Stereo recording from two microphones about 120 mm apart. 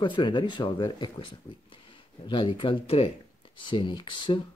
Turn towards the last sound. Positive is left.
turn(degrees=40)  # may be behind; listen again after turning